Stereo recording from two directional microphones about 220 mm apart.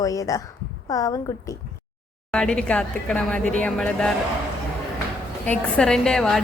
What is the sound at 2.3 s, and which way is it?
A woman's voice, 5° left (ahead or behind).